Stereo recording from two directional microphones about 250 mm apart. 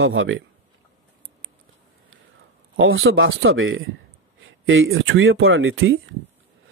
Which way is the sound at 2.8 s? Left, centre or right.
Right.